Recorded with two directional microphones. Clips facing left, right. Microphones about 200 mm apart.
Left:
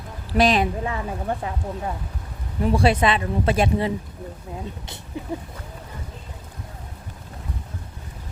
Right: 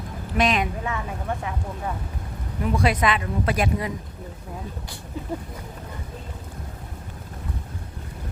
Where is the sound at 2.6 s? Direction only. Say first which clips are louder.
Left 3 dB; 30° left (ahead or behind).